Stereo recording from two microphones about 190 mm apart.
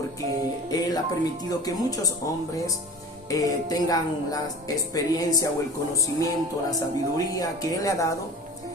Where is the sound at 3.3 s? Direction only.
20° left (ahead or behind).